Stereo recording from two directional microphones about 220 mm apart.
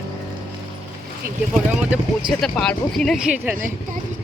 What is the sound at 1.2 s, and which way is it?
Speech, 40° right (ahead or behind).